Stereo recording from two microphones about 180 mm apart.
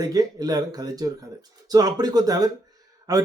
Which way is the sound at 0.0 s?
20° right (ahead or behind).